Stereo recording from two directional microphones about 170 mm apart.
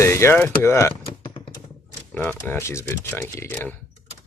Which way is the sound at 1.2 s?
30° left (ahead or behind).